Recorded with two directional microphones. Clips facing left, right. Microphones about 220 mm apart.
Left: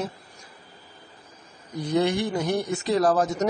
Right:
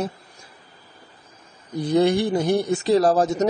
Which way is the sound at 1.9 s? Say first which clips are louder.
Right 5 dB; 35° right (ahead or behind).